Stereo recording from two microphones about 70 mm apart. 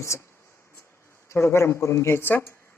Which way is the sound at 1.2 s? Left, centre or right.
Left.